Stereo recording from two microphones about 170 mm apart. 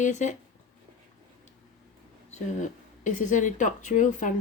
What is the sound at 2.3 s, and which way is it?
Speech, 45° left (ahead or behind).